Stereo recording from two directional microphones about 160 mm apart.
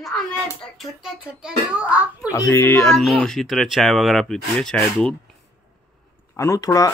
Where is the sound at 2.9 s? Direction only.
Centre (ahead or behind).